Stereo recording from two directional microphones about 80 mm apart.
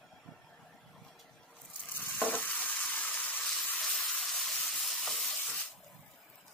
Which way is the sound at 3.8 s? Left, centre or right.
Centre.